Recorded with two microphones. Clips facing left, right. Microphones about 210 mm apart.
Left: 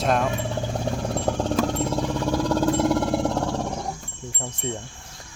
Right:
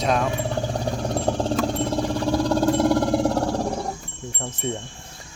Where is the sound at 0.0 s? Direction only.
Centre (ahead or behind).